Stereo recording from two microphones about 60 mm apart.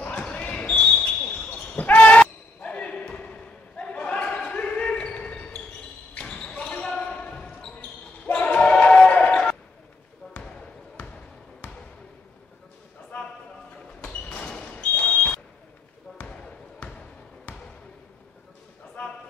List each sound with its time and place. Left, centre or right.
0.0 s basketball bounce: left
14.4 s a sound: centre
16.1 s basketball bounce: left